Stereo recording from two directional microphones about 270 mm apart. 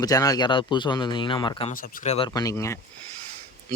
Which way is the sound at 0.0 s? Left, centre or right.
Centre.